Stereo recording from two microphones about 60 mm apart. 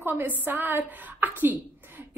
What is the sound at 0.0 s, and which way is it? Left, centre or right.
A woman's voice, right.